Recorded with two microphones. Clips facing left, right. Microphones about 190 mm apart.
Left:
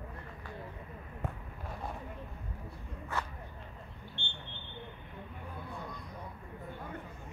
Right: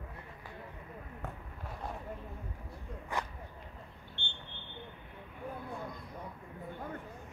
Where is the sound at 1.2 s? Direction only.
15° left (ahead or behind).